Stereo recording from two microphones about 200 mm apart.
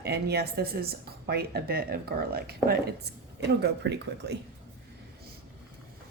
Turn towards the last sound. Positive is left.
turn(degrees=-60)  # may be behind; listen again after turning